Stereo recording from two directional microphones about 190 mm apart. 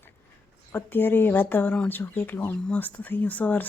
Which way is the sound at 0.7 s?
10° left (ahead or behind).